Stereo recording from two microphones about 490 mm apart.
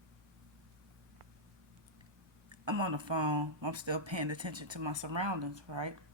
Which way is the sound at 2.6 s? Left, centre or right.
Right.